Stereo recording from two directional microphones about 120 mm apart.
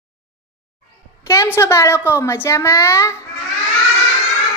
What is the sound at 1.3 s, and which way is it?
A woman's voice, 25° left (ahead or behind).